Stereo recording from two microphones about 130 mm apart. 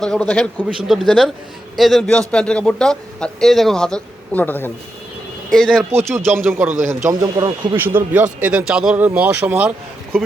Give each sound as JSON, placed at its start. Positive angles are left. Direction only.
{"t": 0.0, "sound": "a man's voice", "side_deg": 10}
{"t": 5.5, "sound": "a man's voice", "side_deg": 5}
{"t": 6.0, "sound": "speech", "side_deg": -20}
{"t": 7.1, "sound": "speech", "side_deg": -25}